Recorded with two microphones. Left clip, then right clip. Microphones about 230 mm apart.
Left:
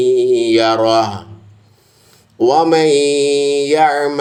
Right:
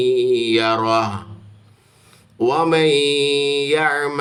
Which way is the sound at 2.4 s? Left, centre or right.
Centre.